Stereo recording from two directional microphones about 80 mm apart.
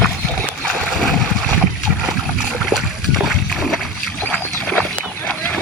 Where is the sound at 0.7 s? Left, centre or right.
Centre.